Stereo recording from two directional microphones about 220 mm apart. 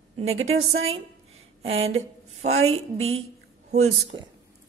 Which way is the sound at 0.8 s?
25° right (ahead or behind).